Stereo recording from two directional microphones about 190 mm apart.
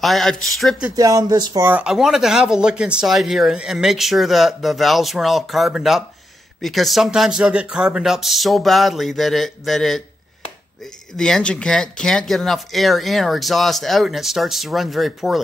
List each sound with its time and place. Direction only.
0.0 s speech: centre (ahead or behind)
0.9 s speech: 20° right (ahead or behind)
1.6 s speech: 5° right (ahead or behind)
11.1 s speech: 5° left (ahead or behind)